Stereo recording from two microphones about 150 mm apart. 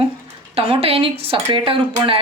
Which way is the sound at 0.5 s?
40° right (ahead or behind).